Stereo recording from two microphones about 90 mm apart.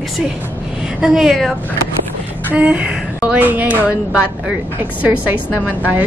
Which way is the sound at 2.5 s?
15° right (ahead or behind).